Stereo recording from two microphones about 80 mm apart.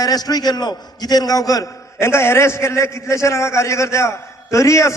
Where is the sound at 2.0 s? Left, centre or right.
Left.